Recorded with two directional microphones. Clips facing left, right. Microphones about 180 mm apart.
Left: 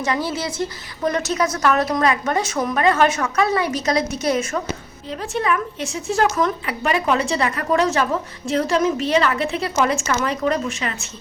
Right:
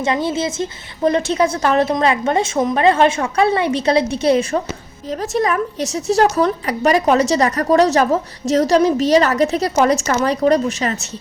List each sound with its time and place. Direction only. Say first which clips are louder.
0.0 s a woman's voice: right 4 dB; 25° right (ahead or behind)